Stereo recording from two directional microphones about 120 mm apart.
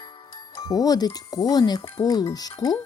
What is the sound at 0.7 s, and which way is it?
Speech, 30° left (ahead or behind).